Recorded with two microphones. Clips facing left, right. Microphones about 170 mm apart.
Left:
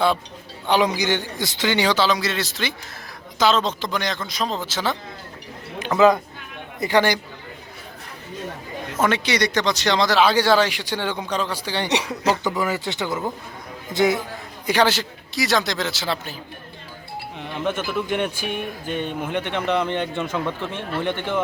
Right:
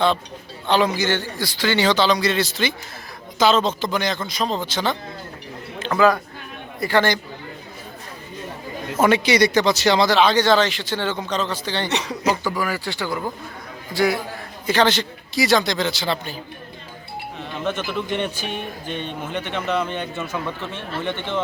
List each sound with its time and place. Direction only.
0.7 s a man's voice: 15° left (ahead or behind)
5.8 s speech: 20° left (ahead or behind)
9.0 s speech: 10° right (ahead or behind); by 14.2 s 20° left (ahead or behind)
14.7 s a man's voice: 10° left (ahead or behind)
17.4 s speech: 15° left (ahead or behind)